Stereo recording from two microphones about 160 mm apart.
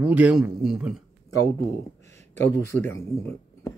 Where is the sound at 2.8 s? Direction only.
15° left (ahead or behind).